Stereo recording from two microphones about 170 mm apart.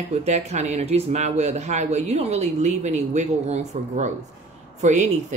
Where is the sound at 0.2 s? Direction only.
40° right (ahead or behind).